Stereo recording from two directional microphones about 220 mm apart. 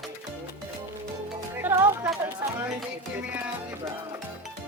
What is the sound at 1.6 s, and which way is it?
Music, 10° right (ahead or behind).